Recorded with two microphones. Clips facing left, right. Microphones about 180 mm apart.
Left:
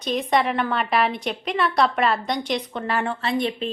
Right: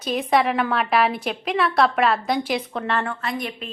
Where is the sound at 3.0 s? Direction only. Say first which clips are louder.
Left 4 dB; 30° left (ahead or behind).